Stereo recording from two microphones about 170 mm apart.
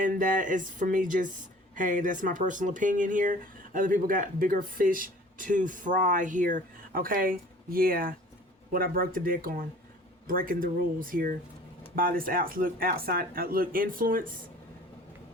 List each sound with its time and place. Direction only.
0.0 s speech: 50° right (ahead or behind)